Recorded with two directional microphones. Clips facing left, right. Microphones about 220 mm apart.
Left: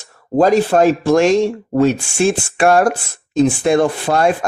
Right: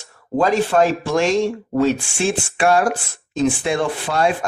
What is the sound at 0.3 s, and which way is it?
Speech, 40° left (ahead or behind).